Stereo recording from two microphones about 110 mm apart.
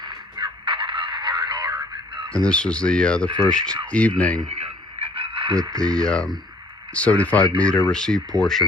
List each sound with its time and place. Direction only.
0.3 s radio: 50° right (ahead or behind)
2.3 s speech: 10° left (ahead or behind)
4.4 s radio: 75° right (ahead or behind); by 5.5 s 55° right (ahead or behind)
5.8 s speech: 10° left (ahead or behind)